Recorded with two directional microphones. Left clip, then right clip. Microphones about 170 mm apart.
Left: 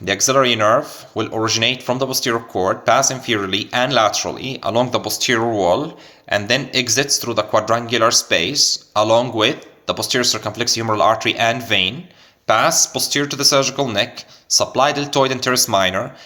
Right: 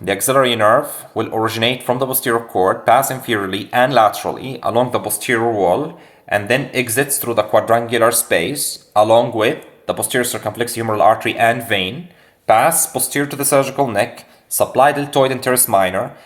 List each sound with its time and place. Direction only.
0.0 s speech: 15° left (ahead or behind)